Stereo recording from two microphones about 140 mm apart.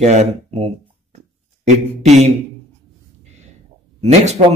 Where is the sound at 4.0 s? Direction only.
50° right (ahead or behind).